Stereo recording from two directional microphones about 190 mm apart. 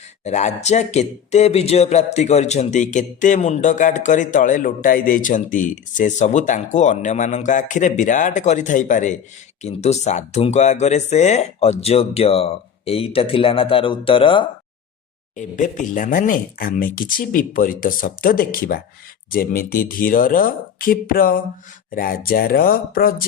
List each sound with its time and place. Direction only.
0.3 s speech: 35° left (ahead or behind)
15.4 s speech: 40° left (ahead or behind)